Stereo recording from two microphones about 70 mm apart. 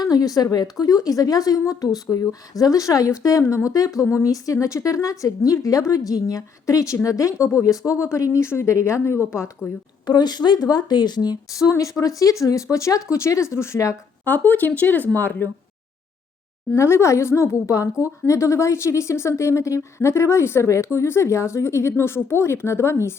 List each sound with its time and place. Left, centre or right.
0.0 s a woman's voice: left
10.1 s speech: left
11.5 s a woman's voice: left
14.3 s speech: left
16.7 s a woman's voice: left